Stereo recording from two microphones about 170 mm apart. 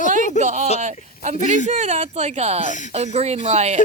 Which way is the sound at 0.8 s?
45° right (ahead or behind).